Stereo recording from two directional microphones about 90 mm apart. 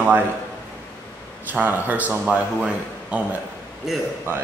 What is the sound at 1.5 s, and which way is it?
Speech, 20° right (ahead or behind).